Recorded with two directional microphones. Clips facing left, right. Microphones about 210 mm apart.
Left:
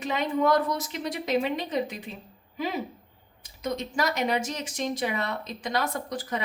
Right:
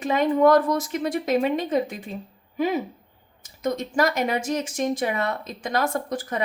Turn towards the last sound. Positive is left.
turn(degrees=-50)  # may be behind; listen again after turning